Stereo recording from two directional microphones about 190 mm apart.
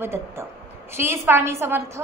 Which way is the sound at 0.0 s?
15° right (ahead or behind).